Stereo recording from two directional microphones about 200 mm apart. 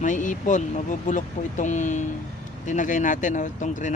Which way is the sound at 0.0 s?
40° left (ahead or behind).